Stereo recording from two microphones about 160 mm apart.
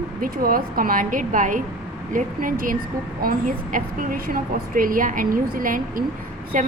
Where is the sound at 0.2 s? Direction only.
60° right (ahead or behind).